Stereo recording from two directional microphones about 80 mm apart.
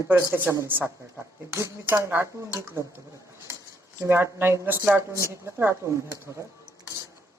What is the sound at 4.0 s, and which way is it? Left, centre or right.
Speech, right.